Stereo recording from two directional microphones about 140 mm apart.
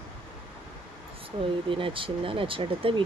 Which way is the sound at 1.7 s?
40° right (ahead or behind).